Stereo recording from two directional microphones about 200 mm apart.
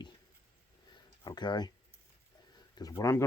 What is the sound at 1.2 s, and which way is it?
Speech, 20° left (ahead or behind).